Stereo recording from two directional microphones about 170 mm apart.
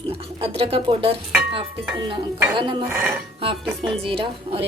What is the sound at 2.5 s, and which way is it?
Speech, 30° right (ahead or behind).